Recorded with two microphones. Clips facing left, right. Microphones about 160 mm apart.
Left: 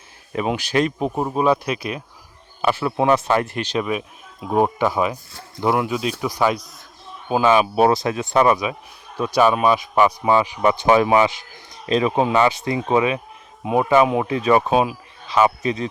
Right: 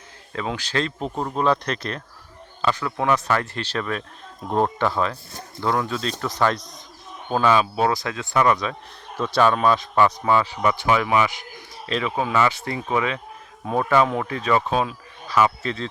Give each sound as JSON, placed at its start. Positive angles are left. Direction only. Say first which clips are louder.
{"t": 0.3, "sound": "a man's voice", "louder": "left 5 dB", "side_deg": 15}
{"t": 7.4, "sound": "speech", "louder": "left 4 dB", "side_deg": 20}